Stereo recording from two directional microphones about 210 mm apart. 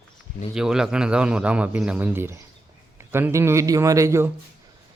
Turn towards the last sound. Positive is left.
turn(degrees=-15)  # may be behind; listen again after turning